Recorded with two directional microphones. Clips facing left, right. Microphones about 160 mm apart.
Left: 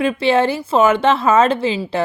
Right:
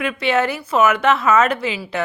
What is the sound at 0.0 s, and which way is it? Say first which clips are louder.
A woman's voice: left 4 dB; 30° left (ahead or behind).